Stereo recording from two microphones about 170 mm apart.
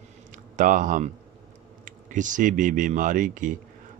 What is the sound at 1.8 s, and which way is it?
Speech, 50° right (ahead or behind).